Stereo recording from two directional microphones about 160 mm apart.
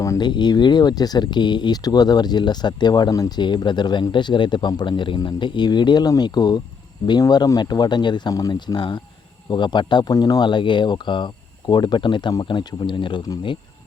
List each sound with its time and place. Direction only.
0.0 s speech: 25° left (ahead or behind)